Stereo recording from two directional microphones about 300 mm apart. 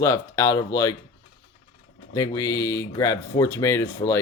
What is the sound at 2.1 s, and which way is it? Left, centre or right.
Speech, centre.